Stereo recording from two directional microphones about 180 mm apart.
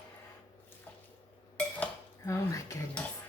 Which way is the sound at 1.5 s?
10° left (ahead or behind).